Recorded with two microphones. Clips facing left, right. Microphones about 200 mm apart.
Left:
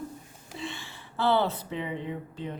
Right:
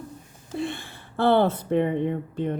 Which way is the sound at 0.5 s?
55° right (ahead or behind).